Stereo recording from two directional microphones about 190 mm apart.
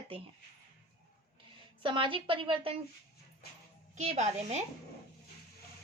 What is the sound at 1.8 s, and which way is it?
Speech, 25° right (ahead or behind).